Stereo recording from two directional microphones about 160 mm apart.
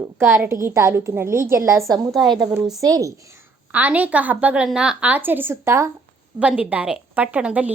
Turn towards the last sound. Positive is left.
turn(degrees=-10)  # may be behind; listen again after turning